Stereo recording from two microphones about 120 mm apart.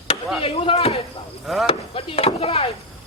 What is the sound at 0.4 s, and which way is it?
Speech, 50° left (ahead or behind).